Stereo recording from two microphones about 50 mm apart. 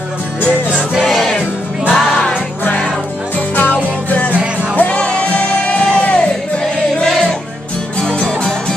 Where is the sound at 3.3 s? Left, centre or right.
Left.